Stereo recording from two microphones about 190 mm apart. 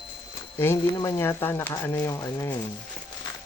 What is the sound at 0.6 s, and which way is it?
Speech, 15° left (ahead or behind).